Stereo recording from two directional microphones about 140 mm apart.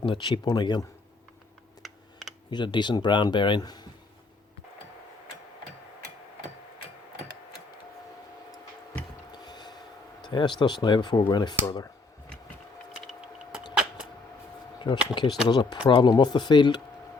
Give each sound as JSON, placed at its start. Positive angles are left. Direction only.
{"t": 0.0, "sound": "speech", "side_deg": 35}
{"t": 1.8, "sound": "computer keyboard", "side_deg": 0}
{"t": 2.5, "sound": "speech", "side_deg": 30}
{"t": 9.3, "sound": "a sound", "side_deg": 30}
{"t": 10.2, "sound": "speech", "side_deg": 30}
{"t": 14.8, "sound": "speech", "side_deg": 35}